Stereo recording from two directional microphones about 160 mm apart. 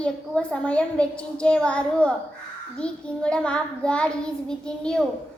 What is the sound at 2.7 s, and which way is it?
Child singing, 5° left (ahead or behind).